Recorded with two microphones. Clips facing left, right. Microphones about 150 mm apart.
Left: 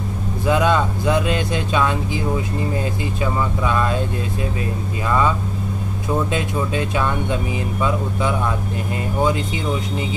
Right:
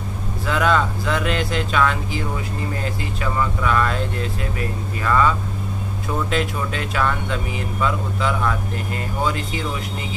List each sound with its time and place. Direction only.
0.5 s speech: 20° left (ahead or behind)
3.3 s speech: 20° left (ahead or behind)
5.0 s speech: 20° left (ahead or behind)